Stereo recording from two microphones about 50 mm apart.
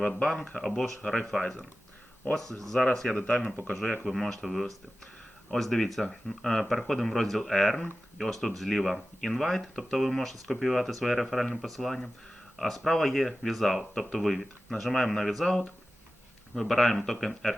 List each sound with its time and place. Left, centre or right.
0.0 s speech: centre
0.6 s speech: centre
3.1 s speech: left
3.7 s speech: centre